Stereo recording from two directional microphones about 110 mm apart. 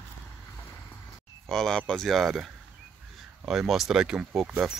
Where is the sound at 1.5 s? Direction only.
5° left (ahead or behind).